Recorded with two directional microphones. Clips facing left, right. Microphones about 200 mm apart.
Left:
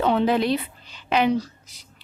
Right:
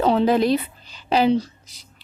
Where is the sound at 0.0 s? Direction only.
35° right (ahead or behind).